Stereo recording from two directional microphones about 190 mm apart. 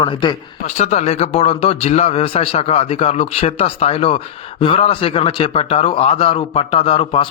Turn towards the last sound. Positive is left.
turn(degrees=30)  # may be behind; listen again after turning